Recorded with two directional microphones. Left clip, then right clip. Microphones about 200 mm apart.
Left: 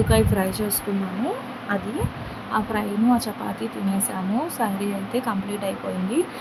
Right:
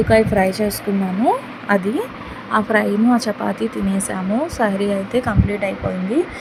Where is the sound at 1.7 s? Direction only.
25° right (ahead or behind).